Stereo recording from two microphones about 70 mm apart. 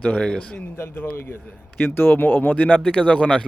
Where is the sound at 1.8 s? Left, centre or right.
Left.